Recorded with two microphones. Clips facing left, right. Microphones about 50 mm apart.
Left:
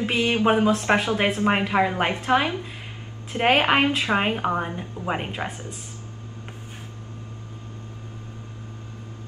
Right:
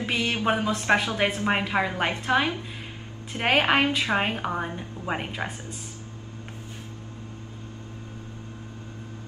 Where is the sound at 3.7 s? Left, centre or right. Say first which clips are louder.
Left 2 dB; centre.